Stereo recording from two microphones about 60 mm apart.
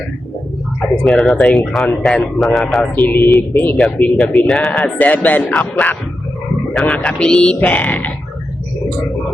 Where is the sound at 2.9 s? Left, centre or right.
Left.